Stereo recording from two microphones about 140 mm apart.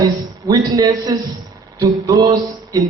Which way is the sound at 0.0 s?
30° right (ahead or behind).